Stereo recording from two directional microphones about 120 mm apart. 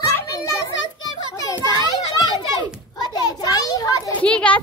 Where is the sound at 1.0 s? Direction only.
30° left (ahead or behind).